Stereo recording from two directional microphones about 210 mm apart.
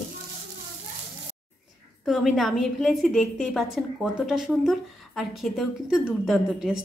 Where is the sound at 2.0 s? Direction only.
Centre (ahead or behind).